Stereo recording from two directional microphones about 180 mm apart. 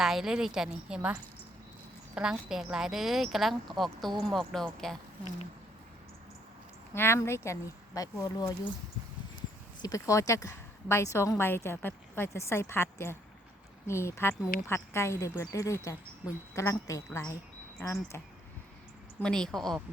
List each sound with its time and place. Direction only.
0.0 s a woman's voice: centre (ahead or behind)
6.9 s a woman's voice: 15° left (ahead or behind)
9.8 s a woman's voice: 20° left (ahead or behind)
19.2 s a woman's voice: 5° left (ahead or behind)